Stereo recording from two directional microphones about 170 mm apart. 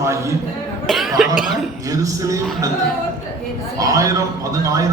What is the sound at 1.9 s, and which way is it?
Speech, 20° right (ahead or behind).